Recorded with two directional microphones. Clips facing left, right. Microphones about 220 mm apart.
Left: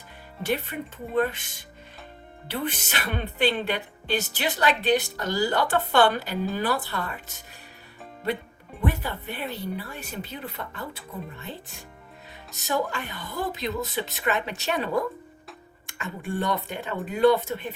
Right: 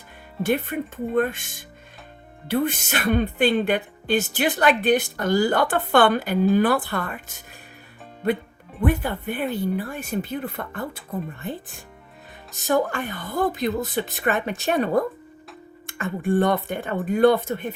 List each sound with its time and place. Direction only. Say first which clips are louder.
0.4 s speech: right 5 dB; 50° right (ahead or behind)
2.5 s speech: right 7 dB; 45° right (ahead or behind)
8.8 s speech: right 6 dB; 50° right (ahead or behind)
12.6 s speech: right 6 dB; 50° right (ahead or behind)
16.0 s speech: right 9 dB; 50° right (ahead or behind)